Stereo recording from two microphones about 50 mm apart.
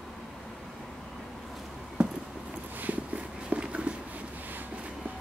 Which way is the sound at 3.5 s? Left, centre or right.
Right.